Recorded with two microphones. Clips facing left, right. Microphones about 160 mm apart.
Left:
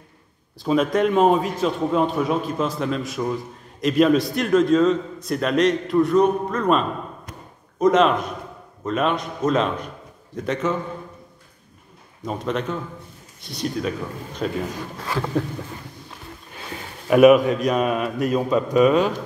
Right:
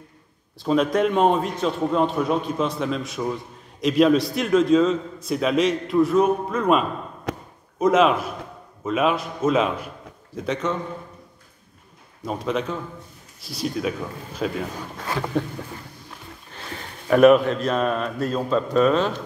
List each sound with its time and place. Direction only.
0.6 s a man's voice: centre (ahead or behind)
7.3 s a sound: 75° right (ahead or behind)
7.8 s a man's voice: 5° right (ahead or behind)
12.3 s a man's voice: centre (ahead or behind)
17.1 s a man's voice: 10° left (ahead or behind)